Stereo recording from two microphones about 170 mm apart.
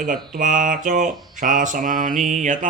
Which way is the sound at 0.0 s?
50° right (ahead or behind).